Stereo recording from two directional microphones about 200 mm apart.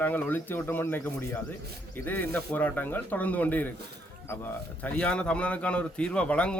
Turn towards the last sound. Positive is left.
turn(degrees=5)  # may be behind; listen again after turning